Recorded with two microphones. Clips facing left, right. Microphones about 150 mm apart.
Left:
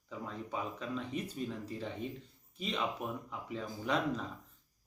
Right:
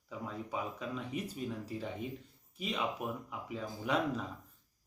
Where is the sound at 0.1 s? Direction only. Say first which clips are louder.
Right 1 dB; 5° right (ahead or behind).